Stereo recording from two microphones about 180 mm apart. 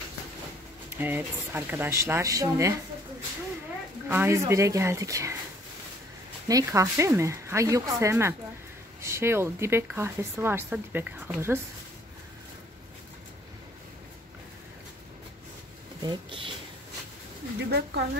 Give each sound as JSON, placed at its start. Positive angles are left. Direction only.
{"t": 0.9, "sound": "speech", "side_deg": -10}
{"t": 4.1, "sound": "speech", "side_deg": -15}
{"t": 6.4, "sound": "speech", "side_deg": -20}
{"t": 16.0, "sound": "speech", "side_deg": -25}
{"t": 17.6, "sound": "speech", "side_deg": -65}